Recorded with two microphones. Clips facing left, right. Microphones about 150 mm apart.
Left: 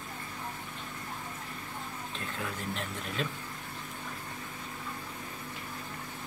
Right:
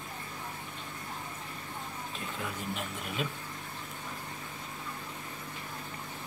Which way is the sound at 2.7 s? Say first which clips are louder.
Even; 5° right (ahead or behind).